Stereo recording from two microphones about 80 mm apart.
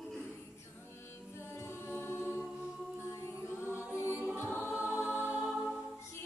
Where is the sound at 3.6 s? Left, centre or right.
Left.